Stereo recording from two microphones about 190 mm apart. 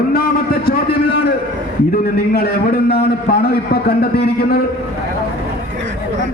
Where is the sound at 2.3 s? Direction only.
55° left (ahead or behind).